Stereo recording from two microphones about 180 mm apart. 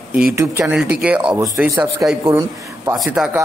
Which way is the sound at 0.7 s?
5° right (ahead or behind).